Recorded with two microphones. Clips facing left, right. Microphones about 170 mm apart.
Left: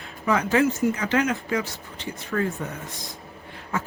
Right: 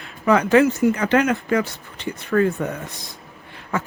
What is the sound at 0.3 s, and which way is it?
Speech, 70° right (ahead or behind).